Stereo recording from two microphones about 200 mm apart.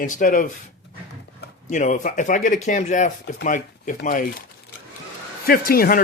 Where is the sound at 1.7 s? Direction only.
40° left (ahead or behind).